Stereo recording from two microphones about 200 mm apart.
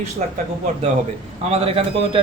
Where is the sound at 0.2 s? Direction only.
35° right (ahead or behind).